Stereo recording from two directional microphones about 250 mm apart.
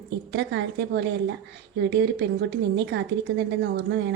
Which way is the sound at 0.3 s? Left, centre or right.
Right.